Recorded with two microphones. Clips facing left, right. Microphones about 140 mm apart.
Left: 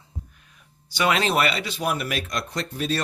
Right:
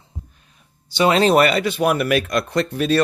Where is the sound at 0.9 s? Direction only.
30° right (ahead or behind).